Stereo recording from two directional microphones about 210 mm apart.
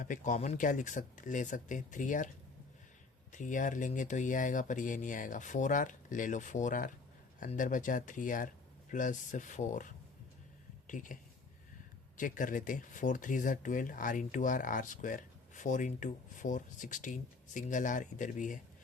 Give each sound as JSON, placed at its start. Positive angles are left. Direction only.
{"t": 0.0, "sound": "speech", "side_deg": 40}
{"t": 3.3, "sound": "speech", "side_deg": 35}